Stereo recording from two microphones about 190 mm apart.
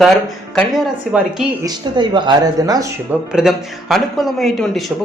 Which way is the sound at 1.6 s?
25° right (ahead or behind).